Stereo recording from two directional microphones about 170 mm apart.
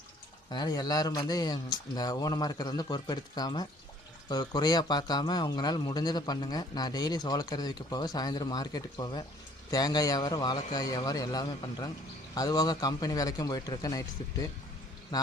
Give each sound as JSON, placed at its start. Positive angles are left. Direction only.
{"t": 0.5, "sound": "speech", "side_deg": 25}